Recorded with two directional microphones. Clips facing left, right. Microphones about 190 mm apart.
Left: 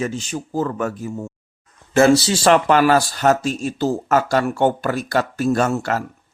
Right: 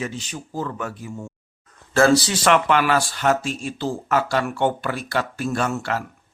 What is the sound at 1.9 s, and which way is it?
A man's voice, 25° left (ahead or behind).